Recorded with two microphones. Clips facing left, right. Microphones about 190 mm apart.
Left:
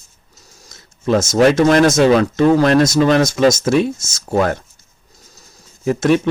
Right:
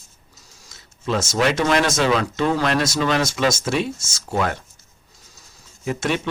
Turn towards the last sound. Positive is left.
turn(degrees=40)  # may be behind; listen again after turning